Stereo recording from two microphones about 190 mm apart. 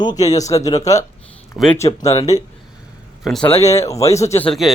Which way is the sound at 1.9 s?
30° left (ahead or behind).